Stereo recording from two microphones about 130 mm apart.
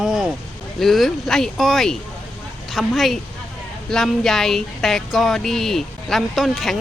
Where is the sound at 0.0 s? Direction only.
5° right (ahead or behind).